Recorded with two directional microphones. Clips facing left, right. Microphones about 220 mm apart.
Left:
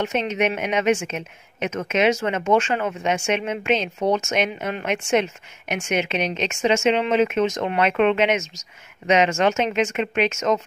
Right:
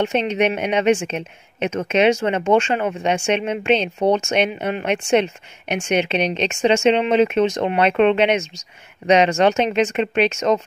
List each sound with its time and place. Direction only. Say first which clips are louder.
0.0 s a woman's voice: right 3 dB; 30° right (ahead or behind)